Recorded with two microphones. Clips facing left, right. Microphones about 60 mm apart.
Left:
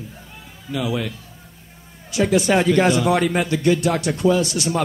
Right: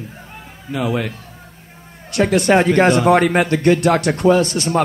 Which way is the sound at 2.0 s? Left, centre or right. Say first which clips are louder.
Right 3 dB; right.